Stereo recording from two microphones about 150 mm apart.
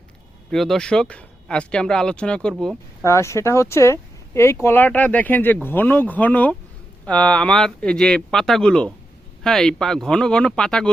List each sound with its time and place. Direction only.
0.5 s speech: centre (ahead or behind)
3.0 s speech: 20° left (ahead or behind)